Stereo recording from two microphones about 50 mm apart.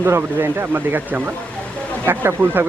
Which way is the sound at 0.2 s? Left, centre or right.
Right.